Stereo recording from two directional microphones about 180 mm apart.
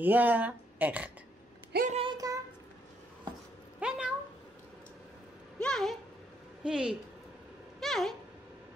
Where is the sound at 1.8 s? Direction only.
35° right (ahead or behind).